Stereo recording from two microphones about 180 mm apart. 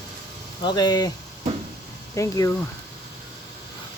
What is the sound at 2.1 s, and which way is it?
Speech, 15° left (ahead or behind).